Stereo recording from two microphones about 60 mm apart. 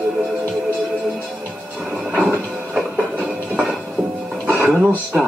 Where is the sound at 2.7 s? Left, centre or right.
Centre.